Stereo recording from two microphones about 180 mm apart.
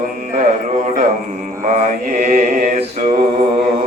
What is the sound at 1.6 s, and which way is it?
Mantra, 45° right (ahead or behind).